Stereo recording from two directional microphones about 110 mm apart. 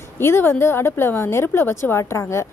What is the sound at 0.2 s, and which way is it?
Speech, 20° left (ahead or behind).